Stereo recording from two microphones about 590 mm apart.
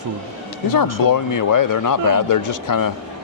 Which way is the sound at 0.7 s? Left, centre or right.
Left.